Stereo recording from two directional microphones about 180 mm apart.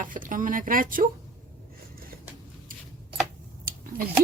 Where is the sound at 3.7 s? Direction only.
55° right (ahead or behind).